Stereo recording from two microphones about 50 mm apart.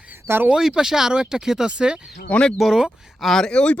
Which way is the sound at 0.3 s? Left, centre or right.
Right.